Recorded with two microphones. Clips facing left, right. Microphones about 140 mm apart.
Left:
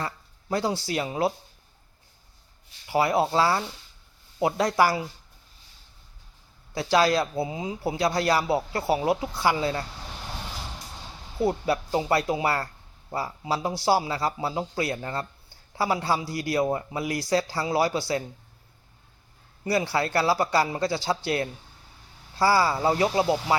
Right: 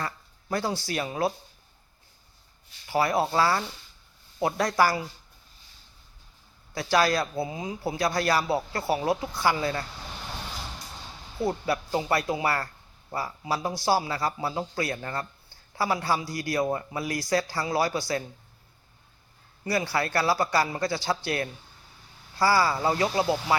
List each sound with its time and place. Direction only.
0.0 s speech: 20° left (ahead or behind)
2.8 s speech: 20° left (ahead or behind)
6.7 s speech: 20° left (ahead or behind)
11.3 s speech: 25° left (ahead or behind)
19.6 s speech: 20° left (ahead or behind)